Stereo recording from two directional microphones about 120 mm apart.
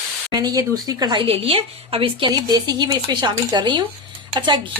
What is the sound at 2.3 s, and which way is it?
Speech, 35° right (ahead or behind).